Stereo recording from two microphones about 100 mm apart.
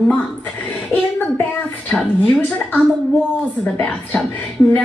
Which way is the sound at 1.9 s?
10° left (ahead or behind).